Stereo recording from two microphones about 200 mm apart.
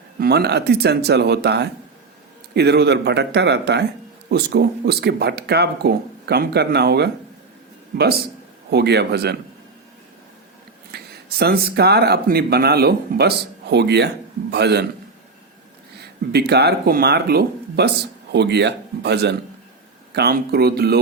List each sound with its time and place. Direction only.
0.2 s speech: 55° right (ahead or behind)
8.7 s speech: 55° right (ahead or behind)
10.9 s speech: 50° right (ahead or behind)
16.0 s speech: 55° right (ahead or behind)